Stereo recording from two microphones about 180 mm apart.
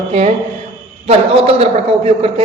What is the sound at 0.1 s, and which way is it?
A man's voice, 35° right (ahead or behind).